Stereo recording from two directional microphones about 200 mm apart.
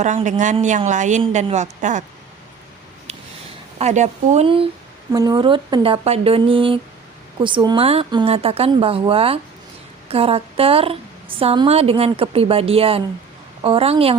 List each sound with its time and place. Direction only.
0.0 s a woman's voice: 35° right (ahead or behind)
3.8 s a woman's voice: 35° right (ahead or behind)